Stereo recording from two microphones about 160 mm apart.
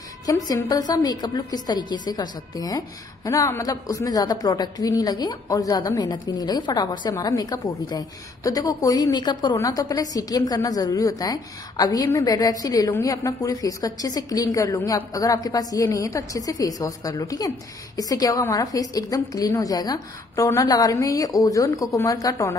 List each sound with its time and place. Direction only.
0.3 s a woman's voice: 20° left (ahead or behind)